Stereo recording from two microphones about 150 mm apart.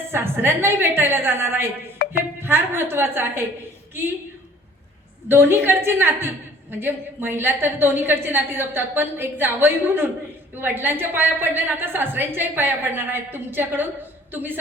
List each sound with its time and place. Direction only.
0.1 s a woman's voice: 15° right (ahead or behind)
2.0 s music: 75° left (ahead or behind)
2.4 s a woman's voice: 15° right (ahead or behind)
5.3 s a woman's voice: 15° right (ahead or behind)